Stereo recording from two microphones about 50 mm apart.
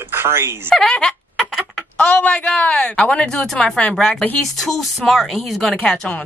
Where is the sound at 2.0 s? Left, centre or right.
Left; by 5.7 s centre.